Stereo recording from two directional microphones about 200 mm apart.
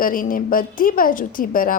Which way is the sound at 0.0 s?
45° left (ahead or behind).